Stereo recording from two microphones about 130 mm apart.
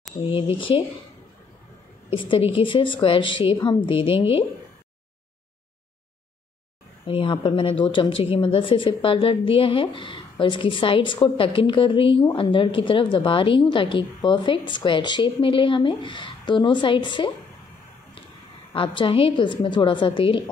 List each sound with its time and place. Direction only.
0.2 s a woman's voice: 45° left (ahead or behind)
2.1 s a woman's voice: 40° left (ahead or behind)
7.1 s a woman's voice: 40° left (ahead or behind)
18.7 s a woman's voice: 40° left (ahead or behind)